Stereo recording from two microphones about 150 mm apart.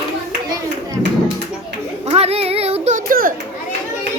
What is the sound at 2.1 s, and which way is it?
Child singing, 40° right (ahead or behind).